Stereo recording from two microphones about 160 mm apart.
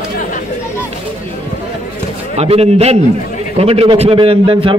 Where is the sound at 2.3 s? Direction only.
40° right (ahead or behind).